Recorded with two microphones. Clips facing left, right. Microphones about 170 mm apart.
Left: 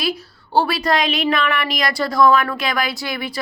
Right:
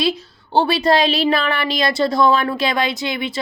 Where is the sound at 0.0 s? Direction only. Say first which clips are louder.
Right 4 dB; 25° right (ahead or behind).